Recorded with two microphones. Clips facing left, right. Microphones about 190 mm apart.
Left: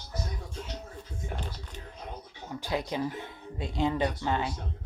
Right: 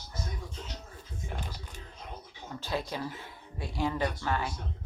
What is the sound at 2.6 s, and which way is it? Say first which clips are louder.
Speech: left 3 dB; 15° left (ahead or behind).